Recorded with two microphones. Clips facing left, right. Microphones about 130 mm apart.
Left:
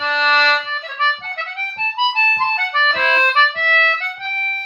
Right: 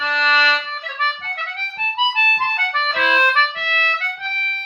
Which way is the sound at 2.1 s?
25° left (ahead or behind).